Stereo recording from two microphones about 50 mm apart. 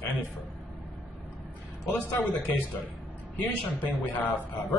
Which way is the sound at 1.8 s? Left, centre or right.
Left.